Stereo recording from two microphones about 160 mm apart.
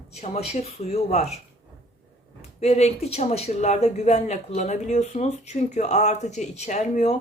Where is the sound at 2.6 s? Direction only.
40° left (ahead or behind).